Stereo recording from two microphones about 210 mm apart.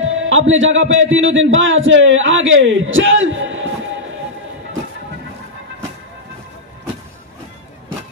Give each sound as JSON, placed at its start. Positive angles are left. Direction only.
{"t": 0.0, "sound": "a man's voice", "side_deg": -70}